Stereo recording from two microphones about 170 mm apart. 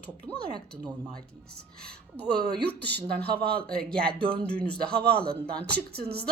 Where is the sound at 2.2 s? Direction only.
70° right (ahead or behind).